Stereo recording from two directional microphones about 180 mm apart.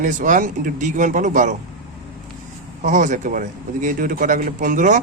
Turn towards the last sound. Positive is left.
turn(degrees=-45)  # may be behind; listen again after turning